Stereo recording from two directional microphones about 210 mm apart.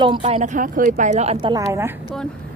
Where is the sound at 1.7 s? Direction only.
10° right (ahead or behind).